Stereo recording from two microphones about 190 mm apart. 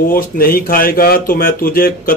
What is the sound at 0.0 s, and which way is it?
A man's voice, 50° left (ahead or behind).